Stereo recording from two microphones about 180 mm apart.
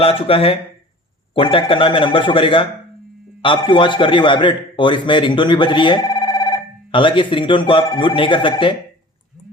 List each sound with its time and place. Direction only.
0.0 s a man's voice: 30° left (ahead or behind)